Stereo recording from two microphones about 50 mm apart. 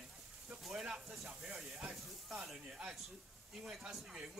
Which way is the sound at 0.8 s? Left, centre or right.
Centre.